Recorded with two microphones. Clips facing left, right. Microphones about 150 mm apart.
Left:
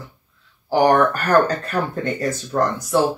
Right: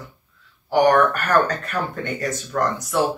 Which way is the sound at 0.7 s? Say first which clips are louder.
Left 1 dB; 30° left (ahead or behind).